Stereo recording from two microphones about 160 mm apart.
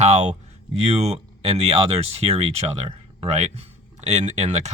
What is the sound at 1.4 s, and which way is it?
Speech, 40° right (ahead or behind).